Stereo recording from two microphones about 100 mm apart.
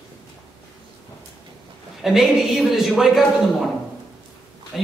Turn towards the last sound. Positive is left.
turn(degrees=0)  # may be behind; listen again after turning